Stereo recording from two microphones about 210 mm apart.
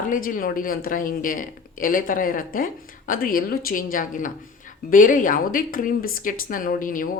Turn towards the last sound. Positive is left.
turn(degrees=40)  # may be behind; listen again after turning